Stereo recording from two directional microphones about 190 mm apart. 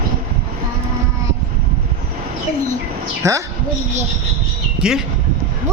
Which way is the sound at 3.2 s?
15° right (ahead or behind).